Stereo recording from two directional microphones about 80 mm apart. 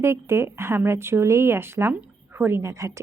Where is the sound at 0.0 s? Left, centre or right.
Right.